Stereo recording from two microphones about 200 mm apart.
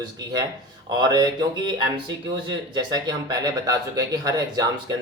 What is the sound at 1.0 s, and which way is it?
Speech, 20° right (ahead or behind).